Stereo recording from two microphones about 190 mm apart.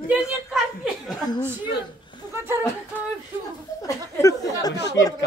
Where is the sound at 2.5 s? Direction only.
10° right (ahead or behind).